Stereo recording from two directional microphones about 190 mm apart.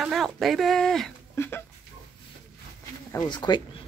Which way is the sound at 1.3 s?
10° left (ahead or behind).